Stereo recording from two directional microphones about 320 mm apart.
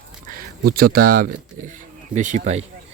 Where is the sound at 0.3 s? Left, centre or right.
Right.